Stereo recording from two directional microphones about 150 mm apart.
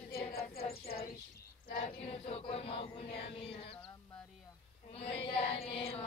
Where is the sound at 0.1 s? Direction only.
90° left.